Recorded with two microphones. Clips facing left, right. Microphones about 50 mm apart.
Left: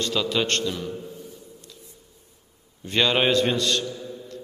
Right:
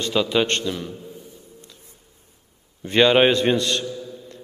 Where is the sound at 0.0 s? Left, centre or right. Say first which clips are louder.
Right 4 dB; right.